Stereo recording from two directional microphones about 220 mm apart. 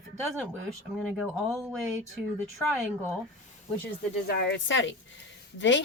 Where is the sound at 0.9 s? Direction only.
Centre (ahead or behind).